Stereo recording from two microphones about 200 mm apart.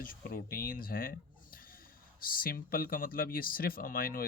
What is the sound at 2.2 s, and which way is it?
Speech, 45° left (ahead or behind).